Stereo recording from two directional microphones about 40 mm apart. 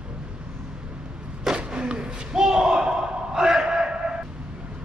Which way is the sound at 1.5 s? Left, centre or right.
Right.